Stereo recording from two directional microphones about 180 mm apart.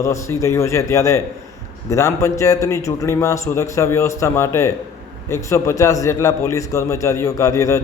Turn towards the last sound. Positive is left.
turn(degrees=15)  # may be behind; listen again after turning